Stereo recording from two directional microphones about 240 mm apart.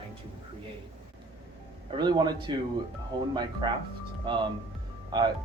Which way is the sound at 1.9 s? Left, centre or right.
Centre.